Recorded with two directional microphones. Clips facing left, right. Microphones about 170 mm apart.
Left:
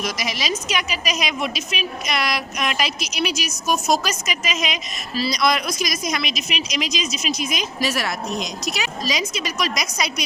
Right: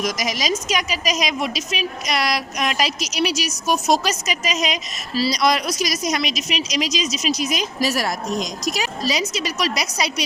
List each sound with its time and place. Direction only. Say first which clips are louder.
0.0 s a woman's voice: right 3 dB; 40° right (ahead or behind)